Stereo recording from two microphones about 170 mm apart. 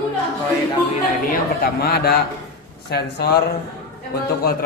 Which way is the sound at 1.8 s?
65° left (ahead or behind).